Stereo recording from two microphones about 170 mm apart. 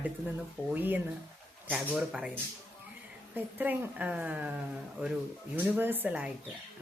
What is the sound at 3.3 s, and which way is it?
Speech, 10° right (ahead or behind).